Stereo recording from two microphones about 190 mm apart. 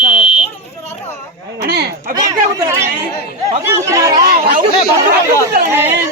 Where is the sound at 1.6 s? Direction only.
55° right (ahead or behind).